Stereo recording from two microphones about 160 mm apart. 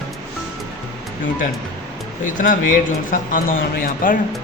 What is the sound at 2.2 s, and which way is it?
A man's voice, 55° left (ahead or behind).